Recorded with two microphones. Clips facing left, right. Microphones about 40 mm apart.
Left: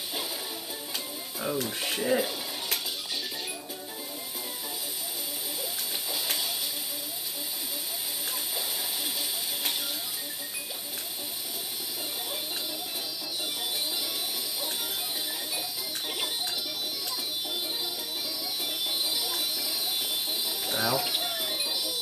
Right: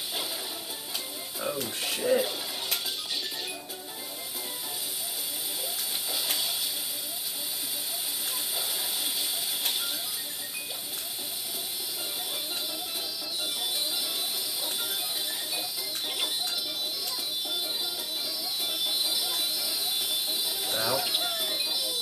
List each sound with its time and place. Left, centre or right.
1.4 s speech: centre
6.1 s a sound: centre
19.1 s music: centre